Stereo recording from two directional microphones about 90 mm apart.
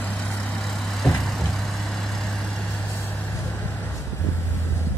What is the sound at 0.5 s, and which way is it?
Vehicle, centre (ahead or behind).